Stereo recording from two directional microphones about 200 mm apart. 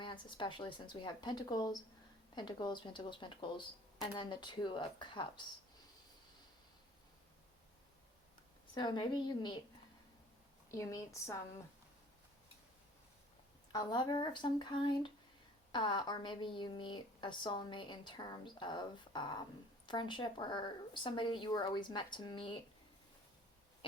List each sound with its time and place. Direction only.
0.0 s a woman's voice: 25° left (ahead or behind)
8.7 s a woman's voice: 20° left (ahead or behind)
10.7 s a woman's voice: 15° left (ahead or behind)
13.7 s a woman's voice: 20° left (ahead or behind)